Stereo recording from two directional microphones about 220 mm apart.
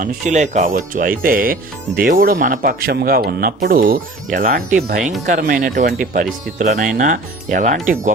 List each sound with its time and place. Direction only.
0.0 s speech: 35° right (ahead or behind)